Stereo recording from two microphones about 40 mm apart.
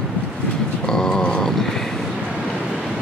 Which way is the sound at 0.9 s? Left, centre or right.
Centre.